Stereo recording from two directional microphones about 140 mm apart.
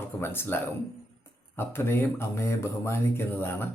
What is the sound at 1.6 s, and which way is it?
Speech, 15° left (ahead or behind).